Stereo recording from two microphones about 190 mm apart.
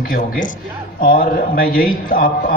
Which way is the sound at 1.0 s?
50° left (ahead or behind).